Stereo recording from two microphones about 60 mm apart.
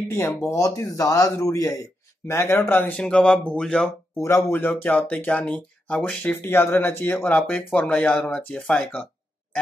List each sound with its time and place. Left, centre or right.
0.1 s speech: left
0.5 s a man's voice: left
2.5 s speech: left
3.0 s speech: centre
4.5 s speech: left
4.8 s speech: left
5.5 s speech: centre
6.3 s speech: left
7.3 s speech: left